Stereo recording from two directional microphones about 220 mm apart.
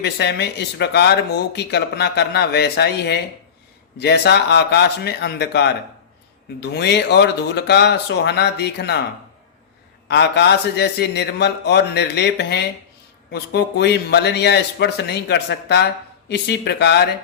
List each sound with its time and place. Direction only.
0.0 s a man's voice: 50° left (ahead or behind)
10.1 s a man's voice: 50° left (ahead or behind)